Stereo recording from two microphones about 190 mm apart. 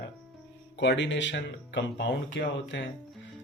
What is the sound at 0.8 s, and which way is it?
Speech, 70° left (ahead or behind).